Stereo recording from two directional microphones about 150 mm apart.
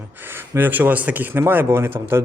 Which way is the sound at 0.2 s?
15° right (ahead or behind).